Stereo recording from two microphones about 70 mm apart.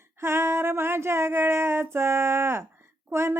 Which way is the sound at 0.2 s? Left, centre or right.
Right.